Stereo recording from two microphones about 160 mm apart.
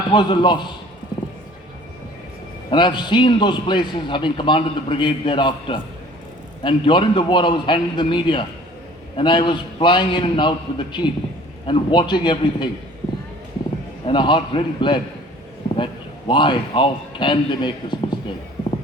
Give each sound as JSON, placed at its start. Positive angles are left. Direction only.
{"t": 0.1, "sound": "a man's voice", "side_deg": 30}
{"t": 2.6, "sound": "a man's voice", "side_deg": 30}
{"t": 14.1, "sound": "a man's voice", "side_deg": 30}